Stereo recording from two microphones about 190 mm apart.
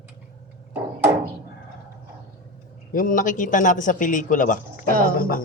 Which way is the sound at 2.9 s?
45° left (ahead or behind).